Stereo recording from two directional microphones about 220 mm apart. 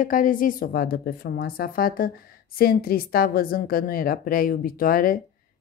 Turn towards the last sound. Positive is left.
turn(degrees=40)  # may be behind; listen again after turning